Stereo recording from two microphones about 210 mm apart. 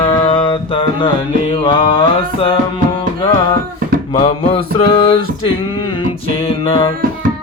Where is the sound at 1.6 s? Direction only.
25° left (ahead or behind).